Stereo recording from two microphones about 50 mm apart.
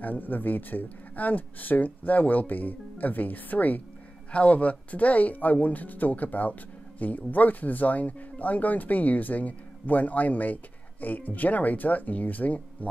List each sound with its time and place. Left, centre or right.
0.0 s speech: left